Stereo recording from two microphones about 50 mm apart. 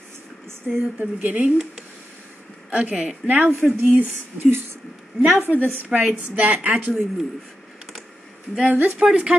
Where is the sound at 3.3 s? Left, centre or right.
Right.